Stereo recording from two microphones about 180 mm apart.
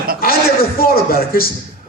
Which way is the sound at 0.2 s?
55° left (ahead or behind).